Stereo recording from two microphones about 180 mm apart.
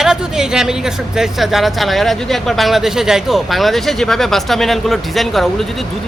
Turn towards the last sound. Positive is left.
turn(degrees=0)  # may be behind; listen again after turning